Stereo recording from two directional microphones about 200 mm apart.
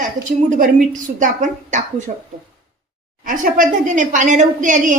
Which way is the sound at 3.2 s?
40° right (ahead or behind).